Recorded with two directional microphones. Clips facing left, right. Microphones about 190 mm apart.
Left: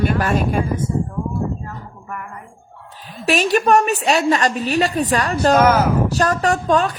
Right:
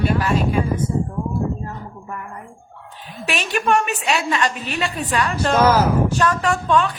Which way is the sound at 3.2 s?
40° left (ahead or behind).